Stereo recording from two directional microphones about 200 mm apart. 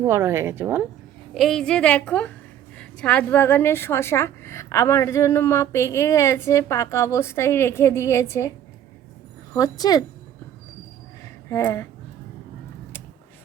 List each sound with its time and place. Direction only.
0.0 s a woman's voice: 15° right (ahead or behind)
1.3 s a woman's voice: centre (ahead or behind); by 10.0 s 20° left (ahead or behind)
11.4 s speech: 10° left (ahead or behind)